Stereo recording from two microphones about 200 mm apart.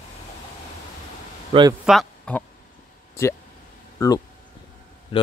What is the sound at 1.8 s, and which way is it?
Speech, 5° left (ahead or behind).